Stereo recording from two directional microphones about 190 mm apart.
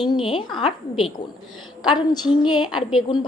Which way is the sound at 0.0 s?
25° left (ahead or behind).